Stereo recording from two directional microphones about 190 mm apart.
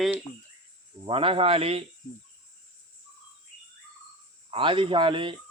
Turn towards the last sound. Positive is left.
turn(degrees=-25)  # may be behind; listen again after turning